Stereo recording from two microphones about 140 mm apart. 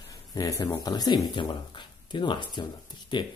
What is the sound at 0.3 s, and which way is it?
Speech, 25° left (ahead or behind).